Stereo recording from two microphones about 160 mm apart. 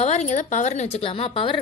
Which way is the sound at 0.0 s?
45° left (ahead or behind).